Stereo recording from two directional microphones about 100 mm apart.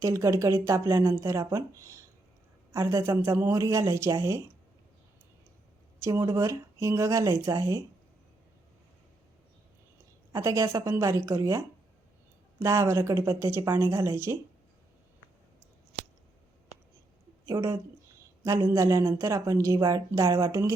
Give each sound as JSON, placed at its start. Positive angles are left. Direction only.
{"t": 0.0, "sound": "a woman's voice", "side_deg": -30}
{"t": 6.0, "sound": "a woman's voice", "side_deg": -35}
{"t": 10.3, "sound": "a woman's voice", "side_deg": -35}
{"t": 17.4, "sound": "a woman's voice", "side_deg": -30}